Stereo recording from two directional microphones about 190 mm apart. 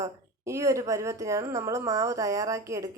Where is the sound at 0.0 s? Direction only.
15° right (ahead or behind).